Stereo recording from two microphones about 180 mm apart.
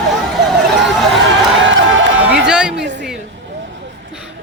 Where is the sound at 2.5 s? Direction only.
5° right (ahead or behind).